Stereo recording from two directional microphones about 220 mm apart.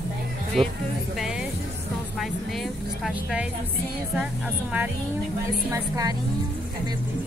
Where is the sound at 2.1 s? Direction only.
Centre (ahead or behind).